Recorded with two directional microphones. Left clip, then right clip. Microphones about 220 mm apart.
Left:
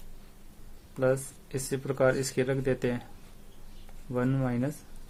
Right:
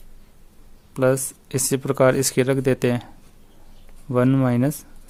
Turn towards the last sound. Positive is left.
turn(degrees=-45)  # may be behind; listen again after turning